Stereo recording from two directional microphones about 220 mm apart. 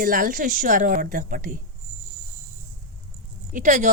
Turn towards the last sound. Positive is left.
turn(degrees=-35)  # may be behind; listen again after turning